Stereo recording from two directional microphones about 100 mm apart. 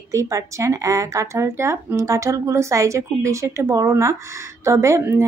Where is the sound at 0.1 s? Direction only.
30° right (ahead or behind).